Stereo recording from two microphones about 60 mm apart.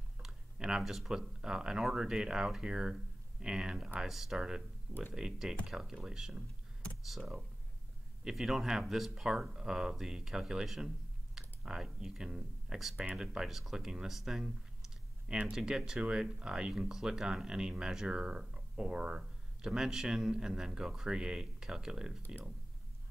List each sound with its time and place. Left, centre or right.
0.2 s speech: centre
15.2 s speech: centre
15.5 s speech: centre